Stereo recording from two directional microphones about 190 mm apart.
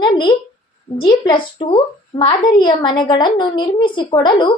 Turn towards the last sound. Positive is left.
turn(degrees=25)  # may be behind; listen again after turning